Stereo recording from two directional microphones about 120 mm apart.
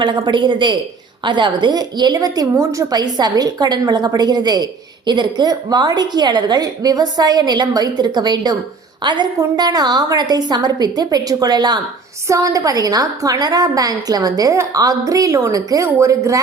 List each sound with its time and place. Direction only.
0.0 s a woman's voice: 40° right (ahead or behind); by 16.4 s 25° right (ahead or behind)